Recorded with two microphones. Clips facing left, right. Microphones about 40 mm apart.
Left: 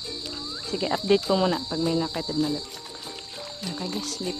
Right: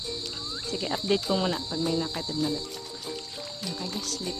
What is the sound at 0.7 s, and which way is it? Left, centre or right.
Speech, centre.